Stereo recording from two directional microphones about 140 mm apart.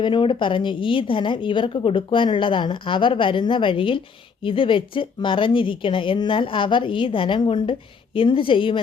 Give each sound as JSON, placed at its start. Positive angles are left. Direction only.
{"t": 0.0, "sound": "a woman's voice", "side_deg": 35}